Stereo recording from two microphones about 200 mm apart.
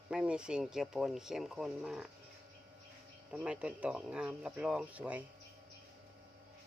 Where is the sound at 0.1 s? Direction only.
5° right (ahead or behind).